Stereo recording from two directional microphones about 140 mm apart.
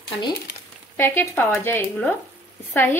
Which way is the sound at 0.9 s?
15° left (ahead or behind).